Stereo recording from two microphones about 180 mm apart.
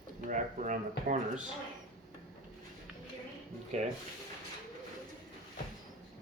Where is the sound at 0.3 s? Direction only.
45° right (ahead or behind).